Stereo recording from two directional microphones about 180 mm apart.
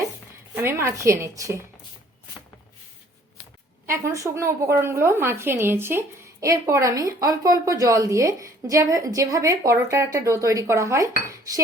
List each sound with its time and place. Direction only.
0.5 s a woman's voice: 15° right (ahead or behind)
3.8 s a woman's voice: 15° right (ahead or behind)